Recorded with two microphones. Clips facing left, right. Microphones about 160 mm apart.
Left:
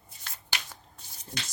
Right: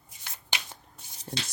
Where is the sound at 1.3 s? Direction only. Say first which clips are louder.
Right 4 dB; 60° right (ahead or behind).